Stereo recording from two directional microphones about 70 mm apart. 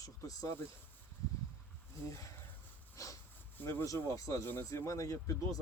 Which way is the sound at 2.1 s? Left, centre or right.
Left.